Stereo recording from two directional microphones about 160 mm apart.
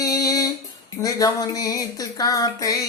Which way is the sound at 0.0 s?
20° left (ahead or behind).